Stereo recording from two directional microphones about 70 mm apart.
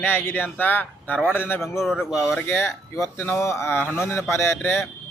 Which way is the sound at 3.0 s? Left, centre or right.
Left.